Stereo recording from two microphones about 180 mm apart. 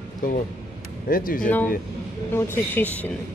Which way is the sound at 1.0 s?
50° left (ahead or behind).